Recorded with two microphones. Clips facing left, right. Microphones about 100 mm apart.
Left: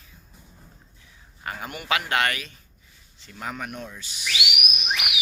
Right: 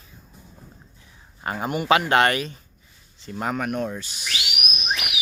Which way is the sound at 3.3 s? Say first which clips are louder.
Right 7 dB; 50° right (ahead or behind).